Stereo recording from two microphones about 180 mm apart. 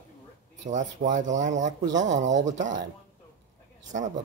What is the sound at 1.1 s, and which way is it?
Speech, 45° right (ahead or behind).